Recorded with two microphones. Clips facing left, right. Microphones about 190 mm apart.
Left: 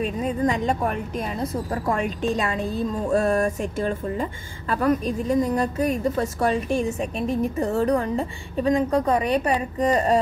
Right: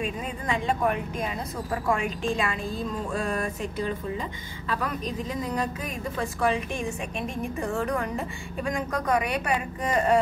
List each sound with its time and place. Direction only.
0.0 s a woman's voice: 40° left (ahead or behind)